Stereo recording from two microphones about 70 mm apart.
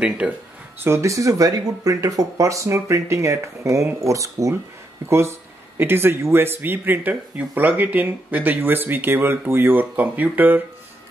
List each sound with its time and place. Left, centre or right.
0.2 s speech: centre
0.8 s speech: right
5.8 s speech: right